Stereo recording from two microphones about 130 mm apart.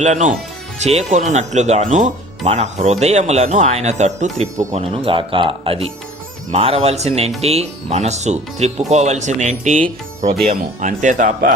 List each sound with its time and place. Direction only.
0.0 s speech: 70° right (ahead or behind)
4.7 s speech: 50° right (ahead or behind); by 11.5 s 75° right (ahead or behind)